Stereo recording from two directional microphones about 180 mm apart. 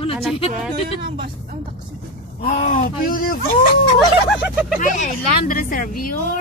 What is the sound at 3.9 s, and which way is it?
Speech, 5° right (ahead or behind).